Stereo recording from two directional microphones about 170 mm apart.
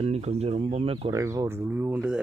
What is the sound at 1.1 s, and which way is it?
Speech, 20° right (ahead or behind).